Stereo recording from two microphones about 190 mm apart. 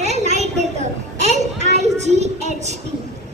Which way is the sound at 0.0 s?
35° right (ahead or behind).